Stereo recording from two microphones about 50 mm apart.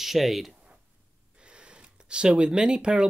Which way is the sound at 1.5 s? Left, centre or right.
Centre.